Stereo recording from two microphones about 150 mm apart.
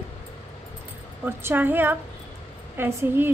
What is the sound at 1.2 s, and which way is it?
A woman's voice, 15° right (ahead or behind).